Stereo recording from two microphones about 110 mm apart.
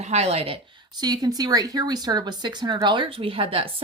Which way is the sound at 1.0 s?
35° right (ahead or behind).